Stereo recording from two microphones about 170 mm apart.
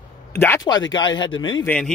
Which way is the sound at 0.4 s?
15° left (ahead or behind).